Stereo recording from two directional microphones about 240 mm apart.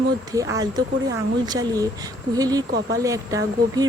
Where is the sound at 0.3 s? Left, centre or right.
Centre.